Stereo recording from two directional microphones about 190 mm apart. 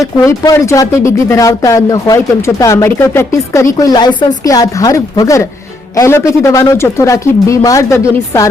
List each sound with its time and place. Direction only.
0.0 s speech: 15° left (ahead or behind)